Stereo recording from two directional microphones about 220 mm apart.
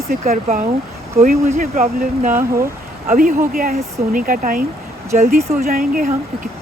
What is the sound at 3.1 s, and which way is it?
Speech, 40° right (ahead or behind).